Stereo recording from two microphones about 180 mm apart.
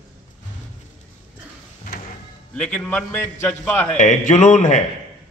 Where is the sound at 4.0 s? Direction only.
45° left (ahead or behind).